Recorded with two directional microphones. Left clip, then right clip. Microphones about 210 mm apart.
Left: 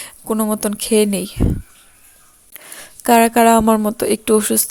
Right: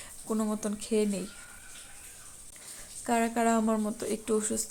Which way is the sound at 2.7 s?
50° left (ahead or behind).